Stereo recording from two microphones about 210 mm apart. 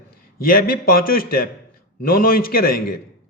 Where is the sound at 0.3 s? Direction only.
45° left (ahead or behind).